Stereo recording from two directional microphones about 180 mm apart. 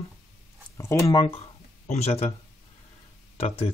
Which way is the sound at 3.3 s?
35° left (ahead or behind).